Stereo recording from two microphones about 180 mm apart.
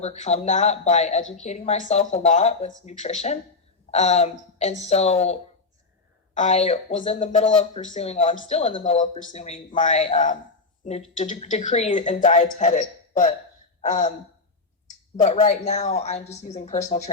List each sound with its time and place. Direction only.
0.0 s a man's voice: 40° left (ahead or behind)
15.1 s a man's voice: 35° left (ahead or behind)